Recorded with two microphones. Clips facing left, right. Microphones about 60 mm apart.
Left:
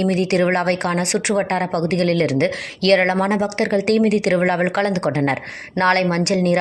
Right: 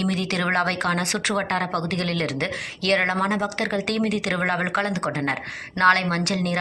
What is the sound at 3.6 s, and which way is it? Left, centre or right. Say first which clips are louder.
Speech: left 7 dB; left.